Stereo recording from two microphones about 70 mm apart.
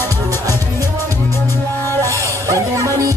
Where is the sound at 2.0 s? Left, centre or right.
Right.